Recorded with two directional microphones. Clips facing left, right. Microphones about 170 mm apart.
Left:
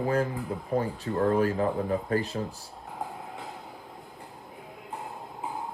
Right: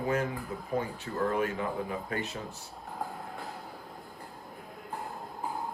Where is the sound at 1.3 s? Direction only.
35° left (ahead or behind).